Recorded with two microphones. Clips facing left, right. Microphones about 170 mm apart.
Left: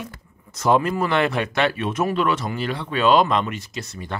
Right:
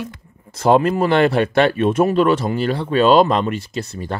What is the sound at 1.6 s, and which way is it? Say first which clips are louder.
Speech: right 7 dB; 45° right (ahead or behind).